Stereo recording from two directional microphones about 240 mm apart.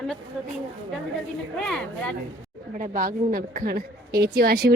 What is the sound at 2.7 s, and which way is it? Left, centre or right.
Speech, right.